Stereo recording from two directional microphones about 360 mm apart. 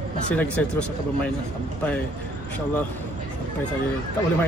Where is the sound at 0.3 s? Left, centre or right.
Centre.